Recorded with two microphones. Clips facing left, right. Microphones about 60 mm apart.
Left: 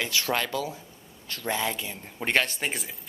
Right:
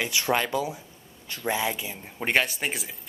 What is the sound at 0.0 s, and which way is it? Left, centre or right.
Speech, centre.